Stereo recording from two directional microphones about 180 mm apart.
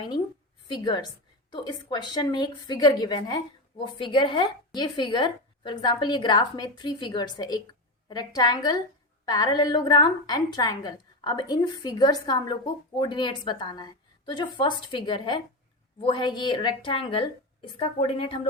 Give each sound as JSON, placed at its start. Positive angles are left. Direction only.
{"t": 0.7, "sound": "a woman's voice", "side_deg": 25}